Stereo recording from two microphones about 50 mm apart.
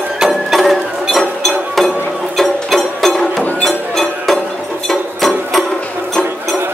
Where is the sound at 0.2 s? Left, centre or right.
Centre.